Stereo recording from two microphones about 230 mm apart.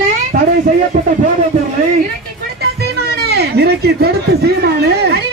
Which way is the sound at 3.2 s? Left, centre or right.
Right.